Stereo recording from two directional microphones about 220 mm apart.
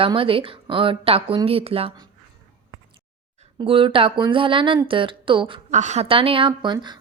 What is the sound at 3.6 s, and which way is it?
Speech, 25° right (ahead or behind).